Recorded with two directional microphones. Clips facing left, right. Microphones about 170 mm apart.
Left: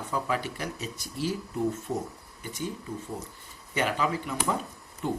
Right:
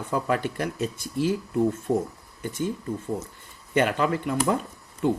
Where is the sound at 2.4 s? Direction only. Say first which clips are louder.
Right 6 dB; 50° right (ahead or behind).